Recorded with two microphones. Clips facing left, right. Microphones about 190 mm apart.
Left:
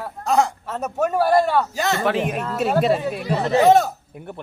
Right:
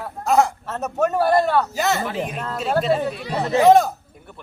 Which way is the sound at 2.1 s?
70° left (ahead or behind).